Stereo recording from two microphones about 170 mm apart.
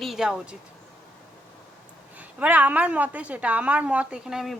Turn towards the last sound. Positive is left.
turn(degrees=-5)  # may be behind; listen again after turning